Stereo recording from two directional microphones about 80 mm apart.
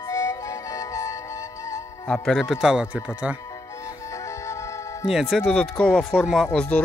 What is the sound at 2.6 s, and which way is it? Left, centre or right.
Speech, centre.